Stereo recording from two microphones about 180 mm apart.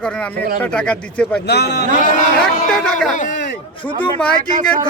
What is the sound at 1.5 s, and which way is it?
Speech, 65° left (ahead or behind).